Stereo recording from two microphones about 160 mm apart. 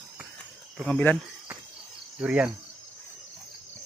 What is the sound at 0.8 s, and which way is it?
Speech, 5° left (ahead or behind).